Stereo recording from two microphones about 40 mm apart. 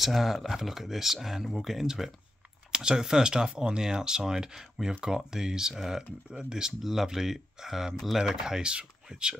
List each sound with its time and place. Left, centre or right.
0.0 s speech: centre
2.7 s speech: centre
6.8 s speech: centre; by 9.3 s right